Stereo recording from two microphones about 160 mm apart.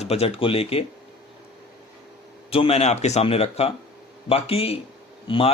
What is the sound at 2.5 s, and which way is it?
Speech, 40° left (ahead or behind).